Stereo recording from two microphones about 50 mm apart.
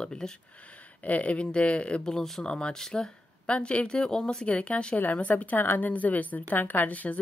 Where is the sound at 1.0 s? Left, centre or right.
Left.